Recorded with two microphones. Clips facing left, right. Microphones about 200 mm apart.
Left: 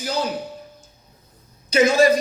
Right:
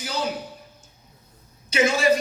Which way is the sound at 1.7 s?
40° left (ahead or behind).